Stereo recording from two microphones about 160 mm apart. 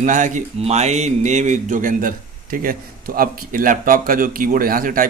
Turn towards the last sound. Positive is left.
turn(degrees=-60)  # may be behind; listen again after turning